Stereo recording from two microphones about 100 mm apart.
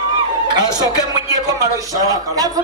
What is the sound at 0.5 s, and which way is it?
A man's voice, 45° right (ahead or behind).